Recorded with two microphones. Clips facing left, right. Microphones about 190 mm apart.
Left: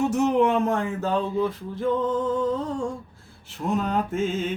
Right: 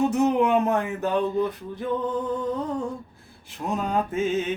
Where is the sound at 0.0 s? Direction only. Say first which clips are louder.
Even; 15° right (ahead or behind).